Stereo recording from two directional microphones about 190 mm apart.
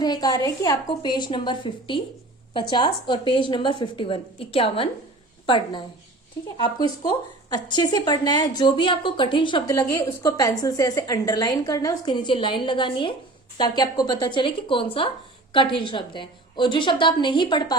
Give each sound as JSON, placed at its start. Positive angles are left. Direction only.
{"t": 0.0, "sound": "speech", "side_deg": 20}